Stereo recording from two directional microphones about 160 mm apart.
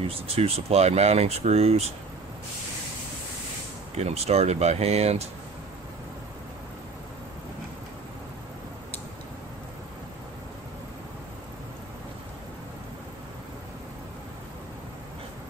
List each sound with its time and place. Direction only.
0.0 s speech: 40° right (ahead or behind)
3.9 s speech: 40° right (ahead or behind)